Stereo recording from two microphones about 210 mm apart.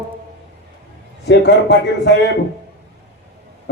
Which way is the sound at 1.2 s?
55° left (ahead or behind).